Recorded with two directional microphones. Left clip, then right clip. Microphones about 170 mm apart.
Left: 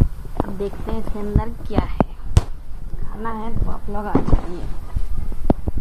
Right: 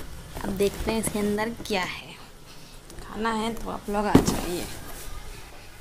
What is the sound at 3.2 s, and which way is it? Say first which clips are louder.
Speech: right 1 dB; 30° right (ahead or behind).